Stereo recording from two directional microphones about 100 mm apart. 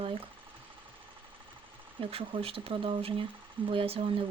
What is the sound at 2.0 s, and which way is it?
Speech, 65° right (ahead or behind).